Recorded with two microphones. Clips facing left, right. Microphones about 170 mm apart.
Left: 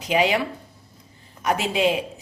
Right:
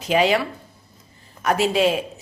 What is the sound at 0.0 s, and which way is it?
A woman's voice, 15° left (ahead or behind).